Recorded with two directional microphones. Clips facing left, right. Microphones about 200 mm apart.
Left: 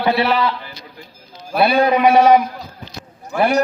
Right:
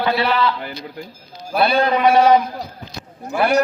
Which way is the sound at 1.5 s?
10° left (ahead or behind).